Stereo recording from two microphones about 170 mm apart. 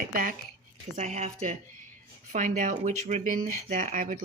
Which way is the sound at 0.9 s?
45° right (ahead or behind).